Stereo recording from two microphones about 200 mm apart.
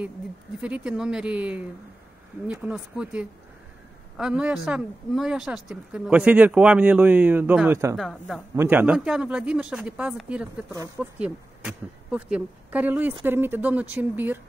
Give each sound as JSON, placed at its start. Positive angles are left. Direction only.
{"t": 0.6, "sound": "speech", "side_deg": -5}
{"t": 7.9, "sound": "speech", "side_deg": 0}